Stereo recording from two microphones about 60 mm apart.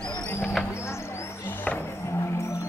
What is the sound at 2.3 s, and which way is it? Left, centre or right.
Music, left.